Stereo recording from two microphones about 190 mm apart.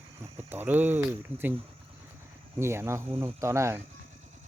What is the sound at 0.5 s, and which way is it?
Speech, 10° right (ahead or behind).